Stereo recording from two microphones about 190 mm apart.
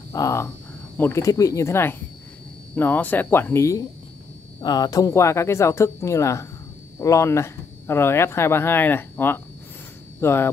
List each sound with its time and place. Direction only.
0.1 s speech: 15° left (ahead or behind)